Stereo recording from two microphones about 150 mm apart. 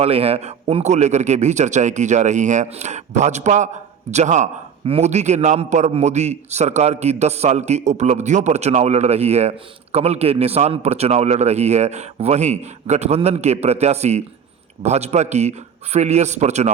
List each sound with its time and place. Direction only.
0.0 s a man's voice: 40° right (ahead or behind)